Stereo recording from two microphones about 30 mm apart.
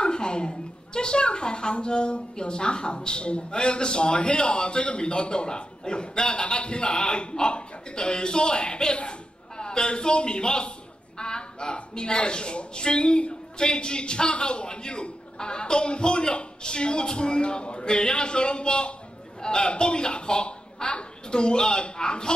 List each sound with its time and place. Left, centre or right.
0.0 s a woman's voice: left